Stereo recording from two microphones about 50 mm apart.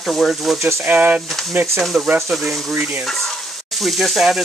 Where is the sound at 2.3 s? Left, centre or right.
Centre.